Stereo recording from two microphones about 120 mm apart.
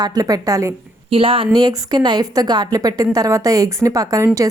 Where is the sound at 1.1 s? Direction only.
50° right (ahead or behind).